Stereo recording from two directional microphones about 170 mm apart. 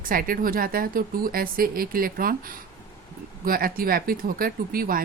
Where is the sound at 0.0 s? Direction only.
55° right (ahead or behind).